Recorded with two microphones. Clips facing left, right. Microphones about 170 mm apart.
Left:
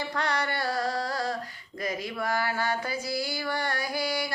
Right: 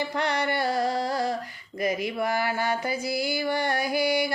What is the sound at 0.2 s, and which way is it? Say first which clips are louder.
Carnatic music: right 3 dB; 20° right (ahead or behind).